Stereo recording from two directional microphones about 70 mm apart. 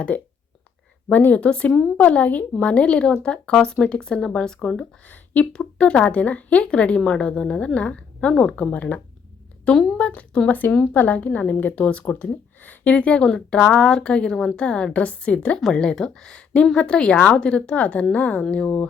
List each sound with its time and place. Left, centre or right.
0.1 s a woman's voice: left
5.0 s a woman's voice: left